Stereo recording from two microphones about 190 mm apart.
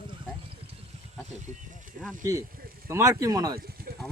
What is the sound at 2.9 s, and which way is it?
Speech, 15° right (ahead or behind).